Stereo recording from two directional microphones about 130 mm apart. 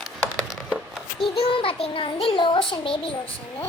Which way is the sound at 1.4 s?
45° left (ahead or behind).